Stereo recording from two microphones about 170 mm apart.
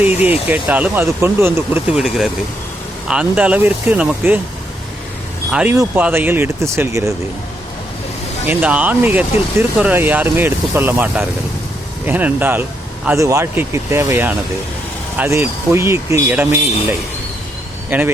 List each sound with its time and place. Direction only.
0.0 s speech: 10° right (ahead or behind)
2.0 s speech: 5° right (ahead or behind)
5.5 s speech: 5° right (ahead or behind)
8.4 s speech: 10° right (ahead or behind)
17.8 s speech: 10° right (ahead or behind)